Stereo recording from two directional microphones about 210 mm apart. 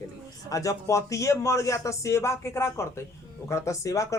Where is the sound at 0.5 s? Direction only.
15° left (ahead or behind).